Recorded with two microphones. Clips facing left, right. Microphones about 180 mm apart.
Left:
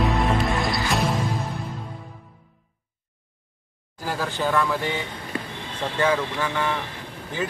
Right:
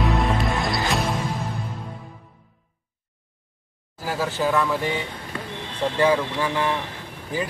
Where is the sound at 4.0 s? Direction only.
5° right (ahead or behind).